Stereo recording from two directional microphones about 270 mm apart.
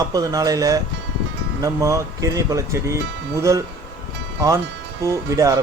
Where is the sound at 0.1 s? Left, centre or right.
Centre.